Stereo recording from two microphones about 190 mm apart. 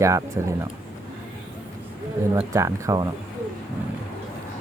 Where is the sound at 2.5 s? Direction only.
15° right (ahead or behind).